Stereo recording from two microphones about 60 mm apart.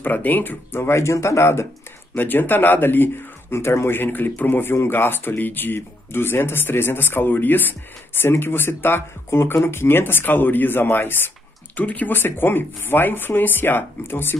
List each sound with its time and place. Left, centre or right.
0.0 s speech: left
0.7 s speech: left
2.1 s speech: left
11.8 s speech: left
12.1 s speech: left